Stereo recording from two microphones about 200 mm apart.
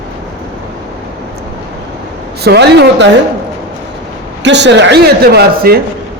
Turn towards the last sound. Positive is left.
turn(degrees=-50)  # may be behind; listen again after turning